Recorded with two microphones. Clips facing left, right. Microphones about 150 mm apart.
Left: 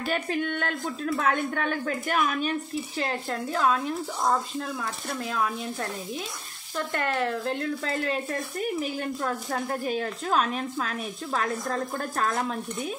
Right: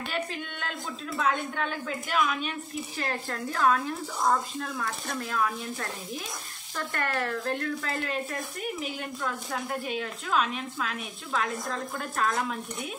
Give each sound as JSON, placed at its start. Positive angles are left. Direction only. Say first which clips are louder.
{"t": 0.1, "sound": "a woman's voice", "louder": "left 9 dB", "side_deg": 55}
{"t": 3.0, "sound": "speech", "louder": "left 2 dB", "side_deg": 25}
{"t": 5.3, "sound": "speech", "louder": "left 1 dB", "side_deg": 25}
{"t": 6.9, "sound": "speech", "louder": "left 3 dB", "side_deg": 20}